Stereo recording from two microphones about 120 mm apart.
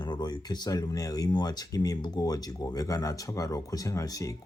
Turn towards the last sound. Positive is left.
turn(degrees=30)  # may be behind; listen again after turning